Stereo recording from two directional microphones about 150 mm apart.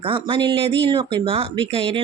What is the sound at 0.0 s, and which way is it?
Speech, 35° right (ahead or behind).